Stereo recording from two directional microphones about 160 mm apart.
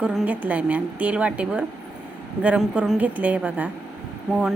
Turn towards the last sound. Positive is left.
turn(degrees=0)  # may be behind; listen again after turning